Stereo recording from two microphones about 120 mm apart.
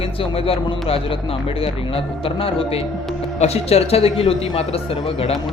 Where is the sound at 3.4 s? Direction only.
60° left (ahead or behind).